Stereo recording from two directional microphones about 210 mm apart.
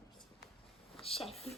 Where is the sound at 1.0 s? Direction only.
30° left (ahead or behind).